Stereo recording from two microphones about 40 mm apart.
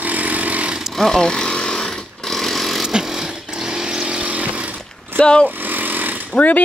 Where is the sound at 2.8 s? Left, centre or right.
Centre.